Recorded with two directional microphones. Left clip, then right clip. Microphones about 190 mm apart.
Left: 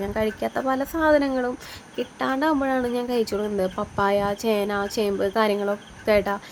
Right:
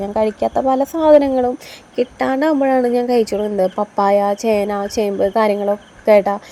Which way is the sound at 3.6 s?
5° left (ahead or behind).